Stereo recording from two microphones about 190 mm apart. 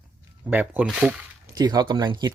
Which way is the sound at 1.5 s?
20° right (ahead or behind).